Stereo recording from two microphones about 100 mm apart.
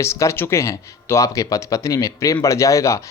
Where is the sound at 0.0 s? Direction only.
30° left (ahead or behind).